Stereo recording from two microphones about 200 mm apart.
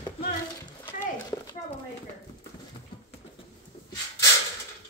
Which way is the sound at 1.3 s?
20° left (ahead or behind).